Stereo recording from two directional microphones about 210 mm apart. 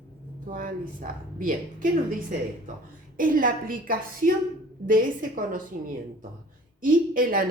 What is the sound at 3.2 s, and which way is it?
Speech, 40° right (ahead or behind).